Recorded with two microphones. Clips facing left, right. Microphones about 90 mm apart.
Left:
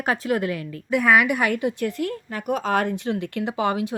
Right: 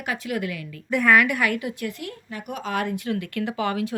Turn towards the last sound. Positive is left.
turn(degrees=20)  # may be behind; listen again after turning